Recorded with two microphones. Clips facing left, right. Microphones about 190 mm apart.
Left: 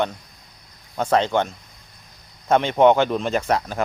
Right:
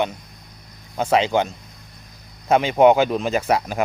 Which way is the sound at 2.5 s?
10° right (ahead or behind).